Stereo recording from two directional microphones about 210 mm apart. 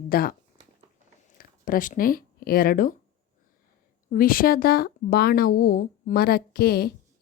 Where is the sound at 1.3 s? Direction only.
40° left (ahead or behind).